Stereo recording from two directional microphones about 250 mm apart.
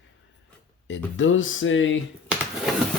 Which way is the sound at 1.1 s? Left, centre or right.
Left.